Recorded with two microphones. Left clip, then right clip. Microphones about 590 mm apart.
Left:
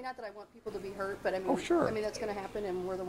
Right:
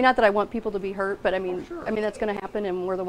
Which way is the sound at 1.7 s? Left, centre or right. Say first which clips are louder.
Left 7 dB; left.